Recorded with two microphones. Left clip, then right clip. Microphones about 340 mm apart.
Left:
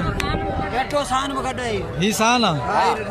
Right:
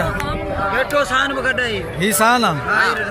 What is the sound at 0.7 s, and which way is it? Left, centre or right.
Speech, left.